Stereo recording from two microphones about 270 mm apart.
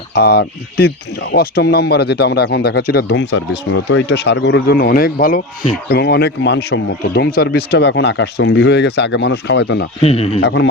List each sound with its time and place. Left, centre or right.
0.1 s speech: left
10.0 s speech: left
10.4 s speech: left